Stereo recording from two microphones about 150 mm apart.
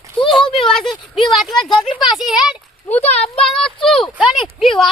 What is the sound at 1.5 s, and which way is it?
Speech, 30° left (ahead or behind).